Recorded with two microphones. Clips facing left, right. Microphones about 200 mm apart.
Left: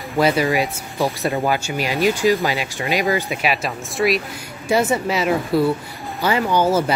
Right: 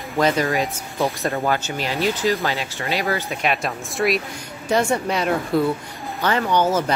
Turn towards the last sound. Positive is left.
turn(degrees=10)  # may be behind; listen again after turning